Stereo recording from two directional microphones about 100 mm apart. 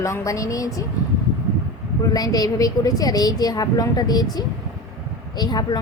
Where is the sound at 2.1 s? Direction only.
40° left (ahead or behind).